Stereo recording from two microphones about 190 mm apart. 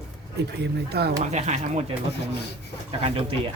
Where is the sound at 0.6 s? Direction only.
60° right (ahead or behind).